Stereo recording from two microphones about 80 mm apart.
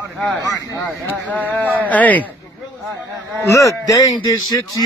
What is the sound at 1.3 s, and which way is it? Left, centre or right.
Speech, left.